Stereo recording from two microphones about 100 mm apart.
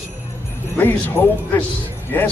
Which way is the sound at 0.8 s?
15° left (ahead or behind).